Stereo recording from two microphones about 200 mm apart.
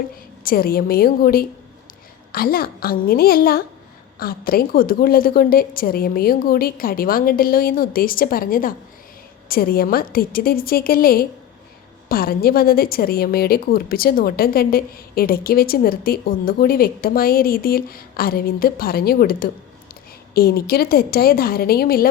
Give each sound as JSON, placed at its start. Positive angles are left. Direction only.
{"t": 0.4, "sound": "a woman's voice", "side_deg": 50}